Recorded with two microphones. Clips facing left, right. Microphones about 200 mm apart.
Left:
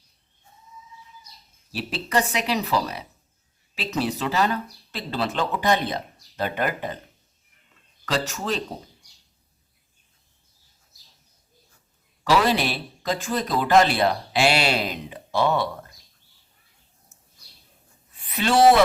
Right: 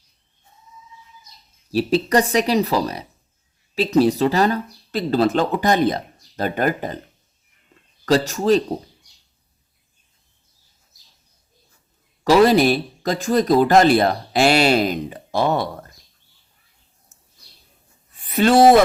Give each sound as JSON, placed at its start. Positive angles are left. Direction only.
{"t": 1.7, "sound": "speech", "side_deg": -40}
{"t": 8.0, "sound": "speech", "side_deg": -35}
{"t": 12.2, "sound": "speech", "side_deg": -40}
{"t": 18.3, "sound": "speech", "side_deg": -45}